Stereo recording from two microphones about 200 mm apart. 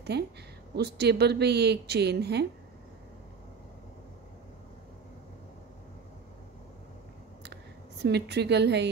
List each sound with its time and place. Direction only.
0.1 s a woman's voice: 55° right (ahead or behind)
8.0 s a woman's voice: 55° right (ahead or behind)